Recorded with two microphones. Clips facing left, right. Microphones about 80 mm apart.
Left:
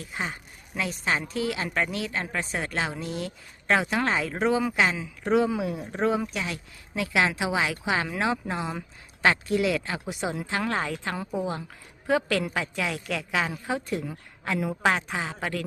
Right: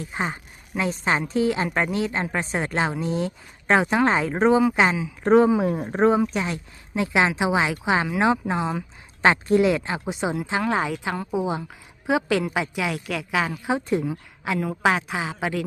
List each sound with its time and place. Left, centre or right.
0.1 s a man's voice: right
5.2 s a man's voice: right; by 13.6 s centre
13.7 s speech: right
14.1 s speech: centre